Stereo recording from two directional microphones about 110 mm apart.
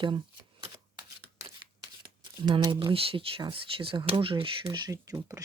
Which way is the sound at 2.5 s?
45° right (ahead or behind).